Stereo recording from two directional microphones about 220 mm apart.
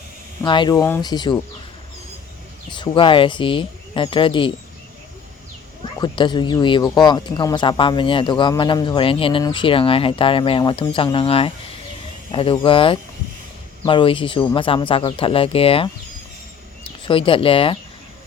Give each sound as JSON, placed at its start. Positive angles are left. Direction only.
{"t": 0.4, "sound": "speech", "side_deg": 20}
{"t": 2.6, "sound": "speech", "side_deg": 20}
{"t": 6.0, "sound": "speech", "side_deg": 20}